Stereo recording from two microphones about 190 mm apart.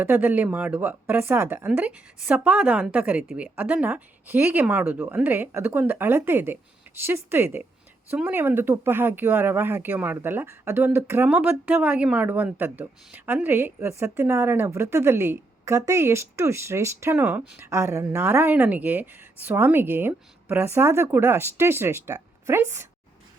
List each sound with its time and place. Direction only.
0.0 s speech: 10° right (ahead or behind)